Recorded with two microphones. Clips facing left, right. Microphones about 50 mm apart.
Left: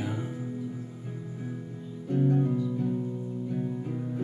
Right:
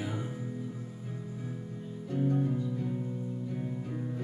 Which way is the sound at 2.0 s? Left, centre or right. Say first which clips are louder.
Left 4 dB; centre.